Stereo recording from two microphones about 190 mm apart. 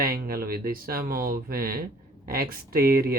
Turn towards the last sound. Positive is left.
turn(degrees=-50)  # may be behind; listen again after turning